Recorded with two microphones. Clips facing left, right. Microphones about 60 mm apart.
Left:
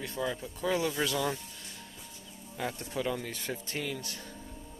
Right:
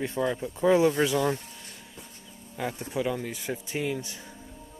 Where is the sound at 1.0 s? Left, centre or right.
Centre.